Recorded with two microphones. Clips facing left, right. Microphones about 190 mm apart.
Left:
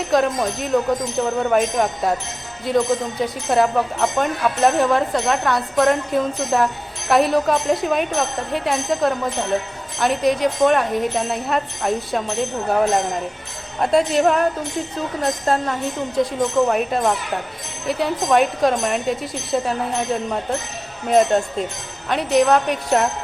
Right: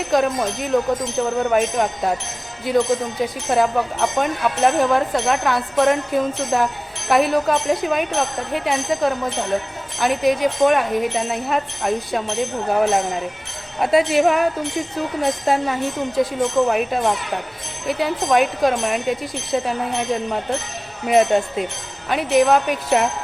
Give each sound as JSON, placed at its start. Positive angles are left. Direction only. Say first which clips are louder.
{"t": 0.1, "sound": "speech", "louder": "even", "side_deg": 0}